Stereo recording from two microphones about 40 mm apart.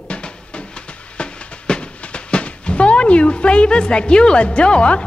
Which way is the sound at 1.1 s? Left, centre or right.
Left.